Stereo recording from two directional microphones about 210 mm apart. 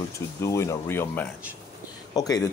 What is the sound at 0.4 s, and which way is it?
Speech, 15° left (ahead or behind).